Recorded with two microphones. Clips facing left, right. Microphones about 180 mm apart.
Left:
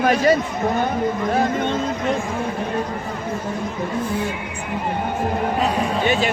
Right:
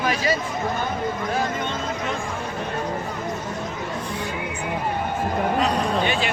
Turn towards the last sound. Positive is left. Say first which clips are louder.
# left 4 dB
turn(degrees=45)  # may be behind; listen again after turning